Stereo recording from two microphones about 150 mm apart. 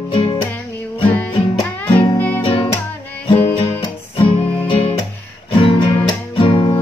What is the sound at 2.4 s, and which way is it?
Music, 35° left (ahead or behind).